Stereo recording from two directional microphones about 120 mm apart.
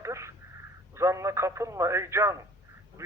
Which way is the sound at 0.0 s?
25° right (ahead or behind).